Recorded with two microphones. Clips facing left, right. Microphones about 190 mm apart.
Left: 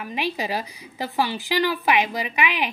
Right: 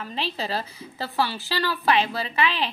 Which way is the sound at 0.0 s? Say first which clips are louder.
Left 3 dB; 15° left (ahead or behind).